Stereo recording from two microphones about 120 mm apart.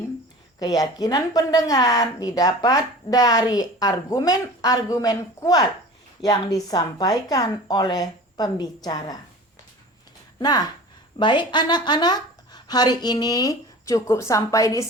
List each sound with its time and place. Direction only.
0.6 s a woman's voice: 30° left (ahead or behind)
10.4 s a woman's voice: 35° left (ahead or behind)